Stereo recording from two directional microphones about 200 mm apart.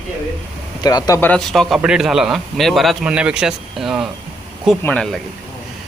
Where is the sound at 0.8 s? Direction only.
20° left (ahead or behind).